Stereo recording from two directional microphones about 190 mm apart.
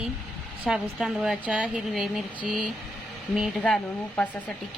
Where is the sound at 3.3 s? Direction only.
Centre (ahead or behind).